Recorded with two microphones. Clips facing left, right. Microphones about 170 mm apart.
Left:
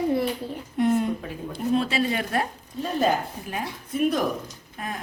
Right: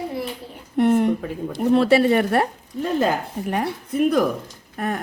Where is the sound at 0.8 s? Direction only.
65° right (ahead or behind).